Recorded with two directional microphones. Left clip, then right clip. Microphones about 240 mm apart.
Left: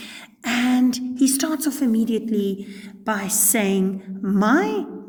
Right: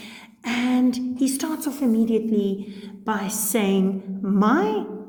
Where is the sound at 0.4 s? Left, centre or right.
Left.